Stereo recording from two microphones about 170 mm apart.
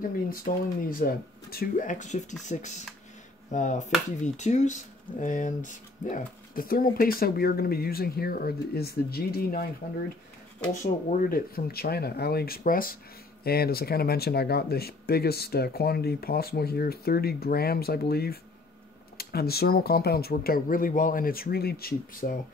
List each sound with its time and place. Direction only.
0.5 s speech: 55° left (ahead or behind)
10.7 s speech: 50° left (ahead or behind)